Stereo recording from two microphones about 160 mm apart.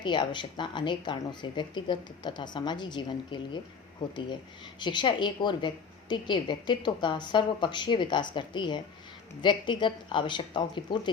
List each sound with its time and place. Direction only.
0.0 s a woman's voice: 30° left (ahead or behind)
4.8 s a woman's voice: 30° left (ahead or behind)